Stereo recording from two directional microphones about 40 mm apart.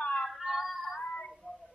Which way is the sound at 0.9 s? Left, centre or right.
Left.